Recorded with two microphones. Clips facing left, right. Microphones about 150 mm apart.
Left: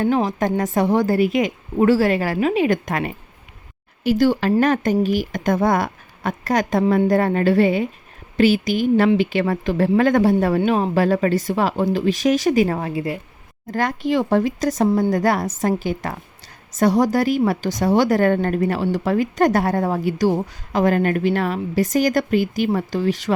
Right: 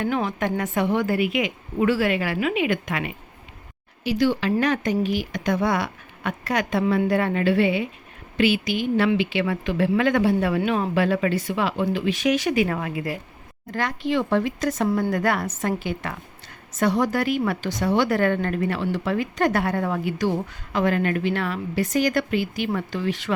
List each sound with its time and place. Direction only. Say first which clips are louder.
0.0 s a woman's voice: left 5 dB; 35° left (ahead or behind)
13.7 s a woman's voice: left 4 dB; 45° left (ahead or behind)